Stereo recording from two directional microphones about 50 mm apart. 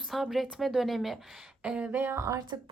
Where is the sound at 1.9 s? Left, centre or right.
Right.